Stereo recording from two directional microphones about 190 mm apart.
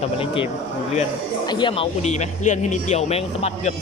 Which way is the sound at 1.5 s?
25° left (ahead or behind).